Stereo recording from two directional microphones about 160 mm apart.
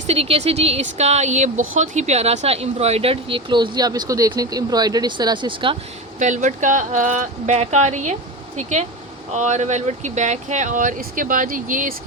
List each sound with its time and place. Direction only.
0.1 s speech: 40° right (ahead or behind)
6.1 s speech: 50° right (ahead or behind)
9.3 s speech: 50° right (ahead or behind)